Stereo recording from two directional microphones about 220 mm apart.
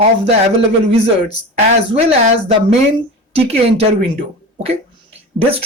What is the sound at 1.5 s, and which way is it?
Speech, 30° right (ahead or behind).